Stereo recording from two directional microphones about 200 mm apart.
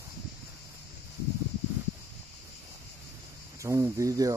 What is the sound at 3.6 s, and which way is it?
Speech, 15° right (ahead or behind).